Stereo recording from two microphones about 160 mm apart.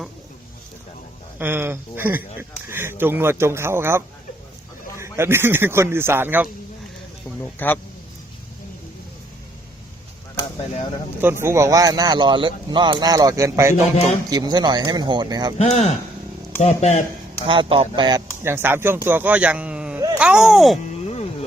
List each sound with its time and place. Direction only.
1.4 s speech: 15° right (ahead or behind)
7.4 s speech: 10° left (ahead or behind)
11.2 s speech: 15° right (ahead or behind)
15.5 s speech: 45° left (ahead or behind)
17.4 s speech: 30° right (ahead or behind)
18.4 s speech: 15° right (ahead or behind)